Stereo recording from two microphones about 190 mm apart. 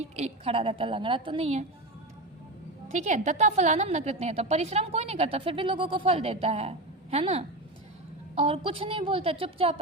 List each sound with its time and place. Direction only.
0.2 s a woman's voice: 30° right (ahead or behind)
2.9 s a woman's voice: 40° right (ahead or behind)